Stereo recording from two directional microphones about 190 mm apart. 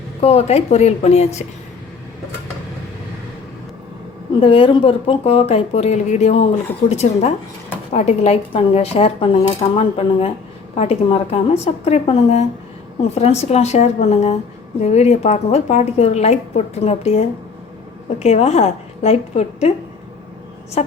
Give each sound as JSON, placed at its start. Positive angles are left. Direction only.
{"t": 0.2, "sound": "speech", "side_deg": 35}
{"t": 4.4, "sound": "speech", "side_deg": 30}